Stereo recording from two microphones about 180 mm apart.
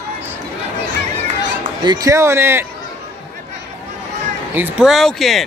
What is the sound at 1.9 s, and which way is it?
Speech, 20° right (ahead or behind).